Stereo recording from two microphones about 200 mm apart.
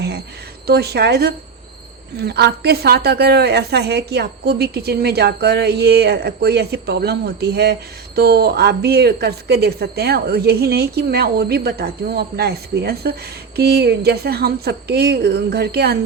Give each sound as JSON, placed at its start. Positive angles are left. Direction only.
{"t": 0.7, "sound": "a woman's voice", "side_deg": -55}